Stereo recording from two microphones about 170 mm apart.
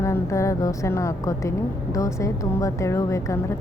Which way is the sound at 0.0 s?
15° left (ahead or behind).